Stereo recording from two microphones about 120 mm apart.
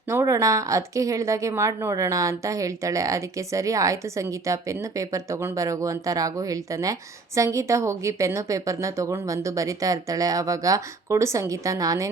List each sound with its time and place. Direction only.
0.1 s speech: 25° right (ahead or behind)